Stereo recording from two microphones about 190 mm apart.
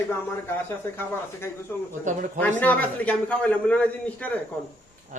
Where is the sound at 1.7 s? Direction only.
10° left (ahead or behind).